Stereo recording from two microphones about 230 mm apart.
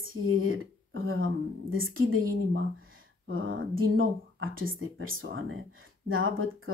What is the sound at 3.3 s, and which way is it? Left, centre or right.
Speech, right.